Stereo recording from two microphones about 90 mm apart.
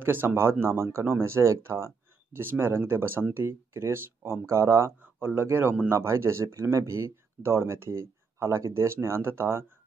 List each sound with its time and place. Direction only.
0.0 s speech: 25° right (ahead or behind)